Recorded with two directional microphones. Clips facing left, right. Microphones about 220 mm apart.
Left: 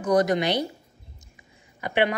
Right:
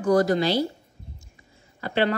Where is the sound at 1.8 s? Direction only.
15° left (ahead or behind).